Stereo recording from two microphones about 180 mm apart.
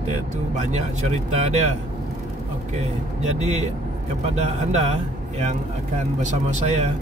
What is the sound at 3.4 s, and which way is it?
Speech, 40° right (ahead or behind).